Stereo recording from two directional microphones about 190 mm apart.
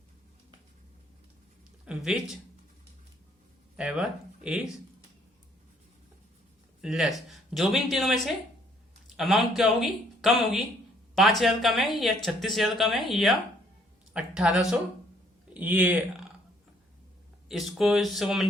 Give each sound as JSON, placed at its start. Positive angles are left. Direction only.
{"t": 1.8, "sound": "speech", "side_deg": -5}
{"t": 3.8, "sound": "speech", "side_deg": -5}
{"t": 6.8, "sound": "speech", "side_deg": 0}
{"t": 17.5, "sound": "speech", "side_deg": 0}